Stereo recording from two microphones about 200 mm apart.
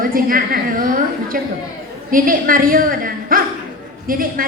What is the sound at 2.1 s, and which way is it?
A woman's voice, 45° right (ahead or behind).